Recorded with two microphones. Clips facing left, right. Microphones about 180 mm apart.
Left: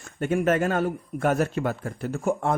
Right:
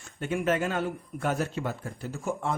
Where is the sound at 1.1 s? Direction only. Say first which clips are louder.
Left 6 dB; 55° left (ahead or behind).